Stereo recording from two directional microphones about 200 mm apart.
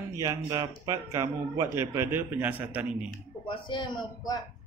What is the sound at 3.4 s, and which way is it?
Speech, 25° left (ahead or behind).